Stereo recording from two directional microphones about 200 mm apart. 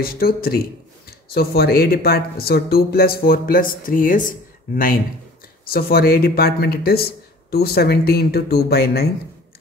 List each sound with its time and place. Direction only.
0.0 s speech: 50° left (ahead or behind)